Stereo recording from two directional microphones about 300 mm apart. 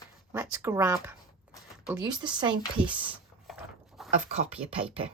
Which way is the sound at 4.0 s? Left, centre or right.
Centre.